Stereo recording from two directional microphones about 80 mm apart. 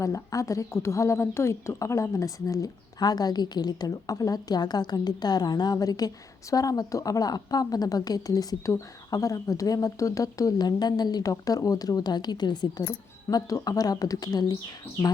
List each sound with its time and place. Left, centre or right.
0.0 s a woman's voice: left
13.3 s a woman's voice: left